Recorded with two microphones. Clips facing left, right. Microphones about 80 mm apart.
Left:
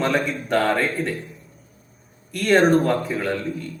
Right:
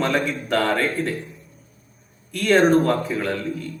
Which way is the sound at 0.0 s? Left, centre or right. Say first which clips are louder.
Even; centre.